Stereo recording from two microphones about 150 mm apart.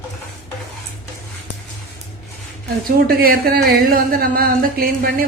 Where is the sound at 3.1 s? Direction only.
75° right (ahead or behind).